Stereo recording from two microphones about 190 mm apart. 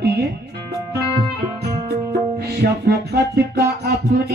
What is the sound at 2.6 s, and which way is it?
Music, 55° right (ahead or behind).